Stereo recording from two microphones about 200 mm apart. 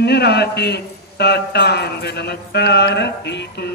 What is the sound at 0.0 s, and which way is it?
A man's voice, 55° left (ahead or behind).